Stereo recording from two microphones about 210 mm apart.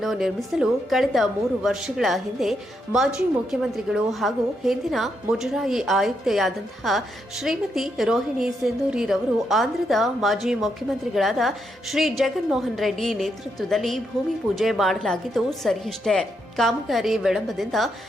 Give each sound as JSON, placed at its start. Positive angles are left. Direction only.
{"t": 0.0, "sound": "a woman's voice", "side_deg": 0}